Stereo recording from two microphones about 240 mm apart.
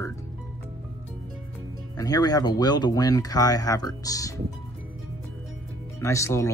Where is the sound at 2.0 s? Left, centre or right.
Centre.